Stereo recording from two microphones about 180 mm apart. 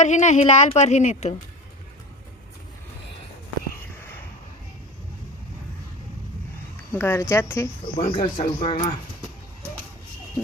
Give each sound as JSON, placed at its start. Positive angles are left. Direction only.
{"t": 0.0, "sound": "a woman's voice", "side_deg": 40}
{"t": 6.9, "sound": "speech", "side_deg": 15}
{"t": 7.9, "sound": "speech", "side_deg": 30}